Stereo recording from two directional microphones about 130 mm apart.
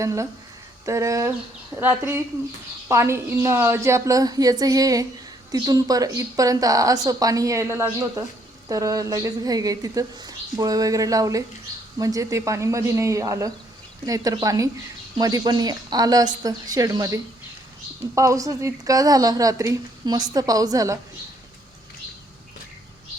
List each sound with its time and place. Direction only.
0.0 s a woman's voice: 25° right (ahead or behind)